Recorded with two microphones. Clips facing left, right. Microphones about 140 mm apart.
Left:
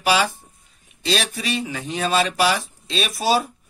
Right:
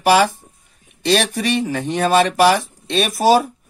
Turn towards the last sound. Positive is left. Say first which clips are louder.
# right 6 dB
turn(degrees=-50)  # may be behind; listen again after turning